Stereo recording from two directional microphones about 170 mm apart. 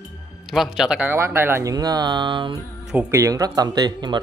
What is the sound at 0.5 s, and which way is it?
Speech, centre (ahead or behind).